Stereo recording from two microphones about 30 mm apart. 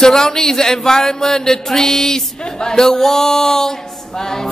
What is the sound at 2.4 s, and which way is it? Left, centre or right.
Speech, left.